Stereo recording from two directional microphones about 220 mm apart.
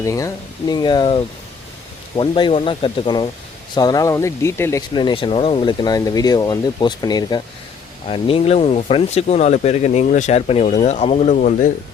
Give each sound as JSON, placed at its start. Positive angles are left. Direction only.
{"t": 0.0, "sound": "speech", "side_deg": 15}